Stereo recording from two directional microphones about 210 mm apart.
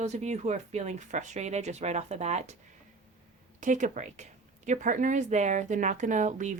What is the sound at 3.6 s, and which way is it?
Speech, 35° right (ahead or behind).